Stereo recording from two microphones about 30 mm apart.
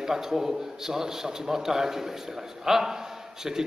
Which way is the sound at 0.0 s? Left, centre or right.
Centre.